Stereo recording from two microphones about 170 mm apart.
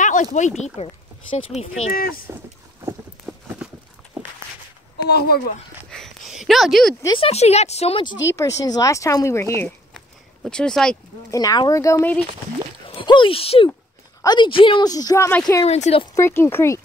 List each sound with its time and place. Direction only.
0.0 s a sound: 45° left (ahead or behind)
0.8 s speech: 40° left (ahead or behind)
1.7 s speech: 55° left (ahead or behind)
3.3 s clip-clop: centre (ahead or behind)
4.9 s speech: 70° left (ahead or behind)
5.9 s a sound: centre (ahead or behind)
7.1 s speech: 35° left (ahead or behind)
8.4 s speech: 20° left (ahead or behind)
9.9 s a sound: 5° left (ahead or behind)
11.2 s a woman's voice: 20° left (ahead or behind)
12.8 s a woman's voice: 30° left (ahead or behind)
15.6 s speech: 40° left (ahead or behind)
16.2 s speech: 15° left (ahead or behind)